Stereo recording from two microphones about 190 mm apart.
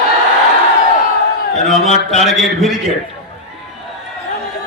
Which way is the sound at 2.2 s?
Centre (ahead or behind).